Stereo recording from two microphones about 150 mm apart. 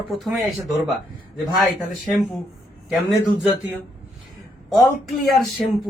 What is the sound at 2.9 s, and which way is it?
Speech, 10° right (ahead or behind).